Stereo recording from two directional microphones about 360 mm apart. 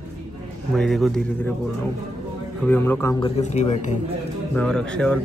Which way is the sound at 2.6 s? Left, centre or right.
Centre.